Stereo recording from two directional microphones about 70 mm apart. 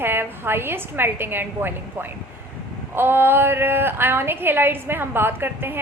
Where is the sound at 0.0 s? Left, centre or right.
Right.